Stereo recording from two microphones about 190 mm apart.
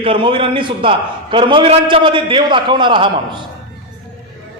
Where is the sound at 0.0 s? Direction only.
30° right (ahead or behind).